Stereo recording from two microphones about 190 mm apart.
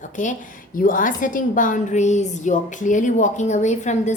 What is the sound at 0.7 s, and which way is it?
A woman's voice, 45° left (ahead or behind).